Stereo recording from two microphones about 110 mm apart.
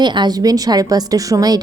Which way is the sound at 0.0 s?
40° right (ahead or behind).